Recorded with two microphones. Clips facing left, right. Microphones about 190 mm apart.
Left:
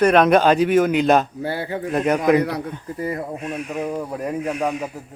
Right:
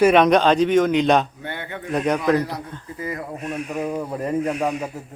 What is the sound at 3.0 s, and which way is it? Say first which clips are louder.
Speech: left 4 dB; 35° left (ahead or behind).